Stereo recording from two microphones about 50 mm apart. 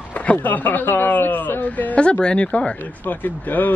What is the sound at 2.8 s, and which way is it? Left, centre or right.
Speech, left.